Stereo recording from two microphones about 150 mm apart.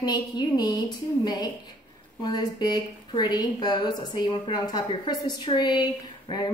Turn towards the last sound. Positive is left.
turn(degrees=30)  # may be behind; listen again after turning